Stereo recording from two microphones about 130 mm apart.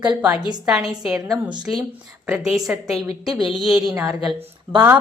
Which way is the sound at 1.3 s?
35° right (ahead or behind).